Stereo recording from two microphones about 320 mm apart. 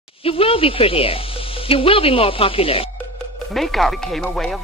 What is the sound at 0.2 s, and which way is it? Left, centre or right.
Speech, centre.